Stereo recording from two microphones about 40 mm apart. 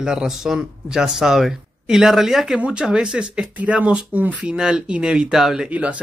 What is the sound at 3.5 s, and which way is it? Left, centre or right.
Speech, right.